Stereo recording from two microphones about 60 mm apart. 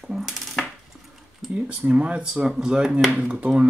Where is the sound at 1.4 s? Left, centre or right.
Centre.